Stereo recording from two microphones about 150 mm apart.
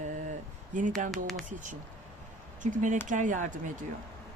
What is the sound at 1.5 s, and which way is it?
Speech, 60° right (ahead or behind).